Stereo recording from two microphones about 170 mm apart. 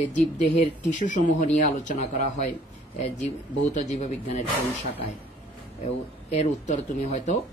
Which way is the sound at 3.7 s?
45° left (ahead or behind).